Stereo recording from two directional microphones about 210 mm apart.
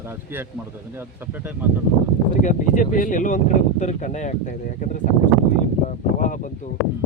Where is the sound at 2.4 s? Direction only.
35° left (ahead or behind).